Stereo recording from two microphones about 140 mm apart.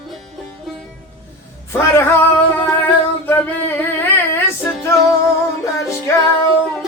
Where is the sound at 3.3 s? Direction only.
15° left (ahead or behind).